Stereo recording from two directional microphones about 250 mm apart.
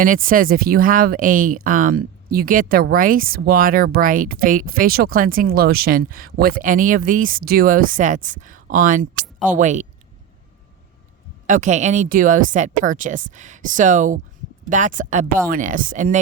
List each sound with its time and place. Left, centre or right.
0.0 s speech: right
11.4 s speech: right